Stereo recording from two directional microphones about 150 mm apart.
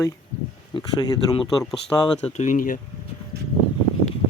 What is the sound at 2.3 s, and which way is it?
Speech, 50° left (ahead or behind).